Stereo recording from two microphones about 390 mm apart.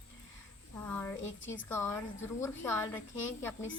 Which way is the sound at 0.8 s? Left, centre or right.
Centre.